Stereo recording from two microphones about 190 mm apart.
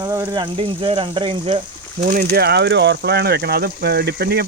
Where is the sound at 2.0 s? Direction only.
40° right (ahead or behind).